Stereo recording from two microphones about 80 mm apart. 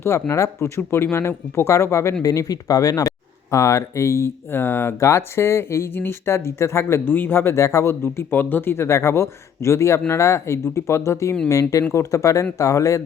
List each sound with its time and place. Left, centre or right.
0.0 s speech: left
2.2 s speech: left